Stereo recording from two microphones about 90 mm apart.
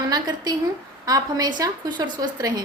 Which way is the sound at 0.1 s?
50° right (ahead or behind).